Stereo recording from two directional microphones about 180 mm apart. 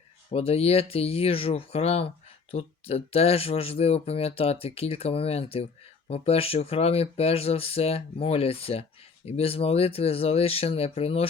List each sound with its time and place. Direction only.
0.3 s speech: 35° left (ahead or behind)